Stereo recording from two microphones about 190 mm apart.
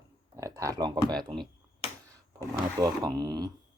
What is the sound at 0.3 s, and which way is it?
Speech, 15° right (ahead or behind).